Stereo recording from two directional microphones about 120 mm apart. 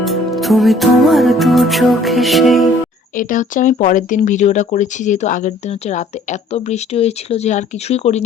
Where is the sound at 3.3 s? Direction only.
90° left.